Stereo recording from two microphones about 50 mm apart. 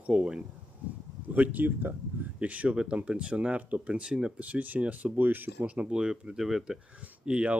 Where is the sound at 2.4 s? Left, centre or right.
Right.